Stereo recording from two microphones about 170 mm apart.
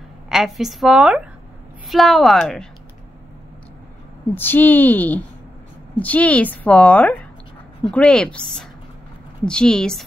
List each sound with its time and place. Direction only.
0.3 s a woman's voice: centre (ahead or behind)
4.4 s a woman's voice: 10° left (ahead or behind)